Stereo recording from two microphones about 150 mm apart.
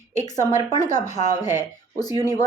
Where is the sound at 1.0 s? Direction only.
50° left (ahead or behind).